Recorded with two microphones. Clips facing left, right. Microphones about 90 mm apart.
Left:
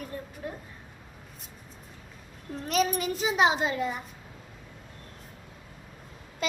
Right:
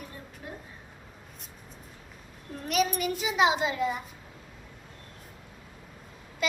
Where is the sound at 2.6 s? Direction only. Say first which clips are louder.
Even; 35° left (ahead or behind).